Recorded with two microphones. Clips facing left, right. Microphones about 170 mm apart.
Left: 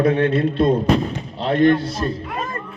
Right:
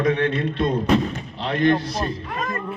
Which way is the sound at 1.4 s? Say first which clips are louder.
Left 6 dB; 30° left (ahead or behind).